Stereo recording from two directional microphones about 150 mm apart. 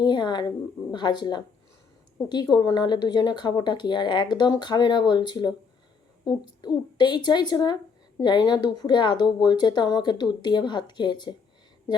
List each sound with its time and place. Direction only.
0.0 s speech: 30° left (ahead or behind)